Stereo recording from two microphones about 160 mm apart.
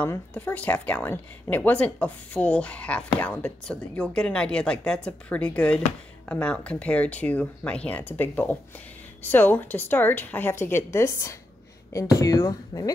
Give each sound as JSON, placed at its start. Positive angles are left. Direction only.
{"t": 0.0, "sound": "a woman's voice", "side_deg": 10}